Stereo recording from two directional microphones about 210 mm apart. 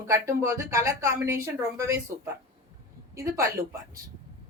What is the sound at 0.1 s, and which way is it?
A woman's voice, 15° right (ahead or behind).